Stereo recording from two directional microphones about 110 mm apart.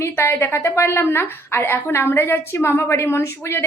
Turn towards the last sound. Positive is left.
turn(degrees=20)  # may be behind; listen again after turning